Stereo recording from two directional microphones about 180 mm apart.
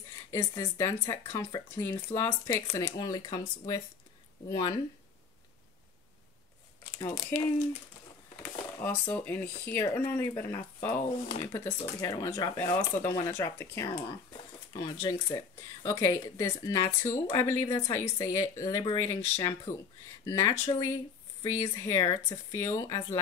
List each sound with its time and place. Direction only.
0.3 s speech: 15° left (ahead or behind)
7.0 s speech: 15° left (ahead or behind)
8.7 s speech: 10° left (ahead or behind)
14.3 s a sound: 25° left (ahead or behind)
15.2 s speech: 15° left (ahead or behind)